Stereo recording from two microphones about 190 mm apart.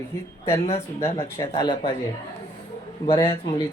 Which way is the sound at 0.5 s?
35° left (ahead or behind).